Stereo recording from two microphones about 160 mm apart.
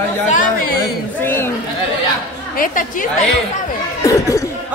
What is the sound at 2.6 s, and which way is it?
Speech, 55° left (ahead or behind).